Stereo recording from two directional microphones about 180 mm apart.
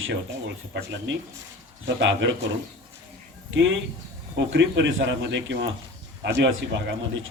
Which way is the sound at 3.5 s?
90° right.